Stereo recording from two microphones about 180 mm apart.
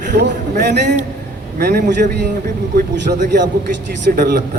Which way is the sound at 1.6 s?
55° right (ahead or behind).